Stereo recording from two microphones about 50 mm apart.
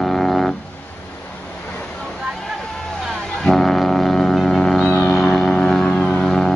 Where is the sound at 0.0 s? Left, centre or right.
Centre.